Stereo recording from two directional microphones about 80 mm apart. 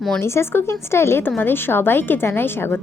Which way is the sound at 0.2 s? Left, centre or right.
Left.